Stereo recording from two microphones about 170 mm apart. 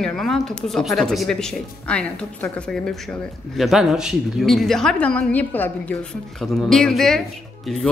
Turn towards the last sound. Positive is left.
turn(degrees=5)  # may be behind; listen again after turning